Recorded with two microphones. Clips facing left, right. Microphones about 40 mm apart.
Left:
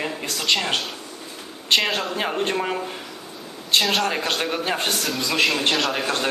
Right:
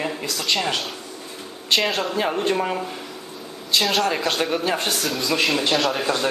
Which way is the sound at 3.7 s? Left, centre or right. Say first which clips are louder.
Left 1 dB; left.